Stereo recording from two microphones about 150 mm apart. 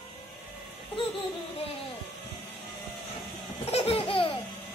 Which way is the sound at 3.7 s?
40° left (ahead or behind).